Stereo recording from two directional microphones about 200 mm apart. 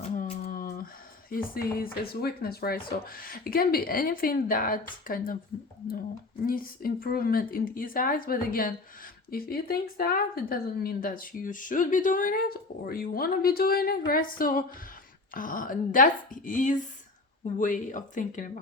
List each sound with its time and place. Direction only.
0.2 s a sound: 45° left (ahead or behind)
1.3 s speech: 45° left (ahead or behind)
6.4 s speech: 45° left (ahead or behind)